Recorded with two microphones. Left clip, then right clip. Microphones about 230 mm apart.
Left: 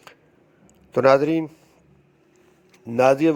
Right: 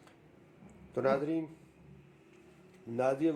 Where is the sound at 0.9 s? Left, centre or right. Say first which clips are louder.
Left 15 dB; left.